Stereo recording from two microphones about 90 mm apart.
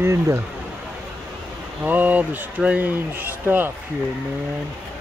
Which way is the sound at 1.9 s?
20° right (ahead or behind).